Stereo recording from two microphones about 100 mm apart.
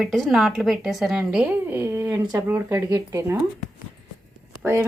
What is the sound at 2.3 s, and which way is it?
Speech, 25° right (ahead or behind).